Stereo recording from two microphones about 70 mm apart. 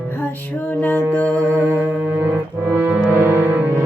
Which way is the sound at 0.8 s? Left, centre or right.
Left.